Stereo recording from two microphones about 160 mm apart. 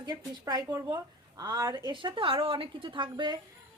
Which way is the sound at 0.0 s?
25° right (ahead or behind).